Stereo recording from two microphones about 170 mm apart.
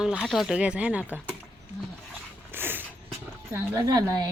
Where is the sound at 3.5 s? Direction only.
20° right (ahead or behind).